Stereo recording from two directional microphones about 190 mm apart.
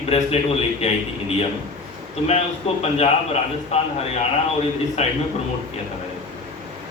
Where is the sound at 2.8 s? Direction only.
35° left (ahead or behind).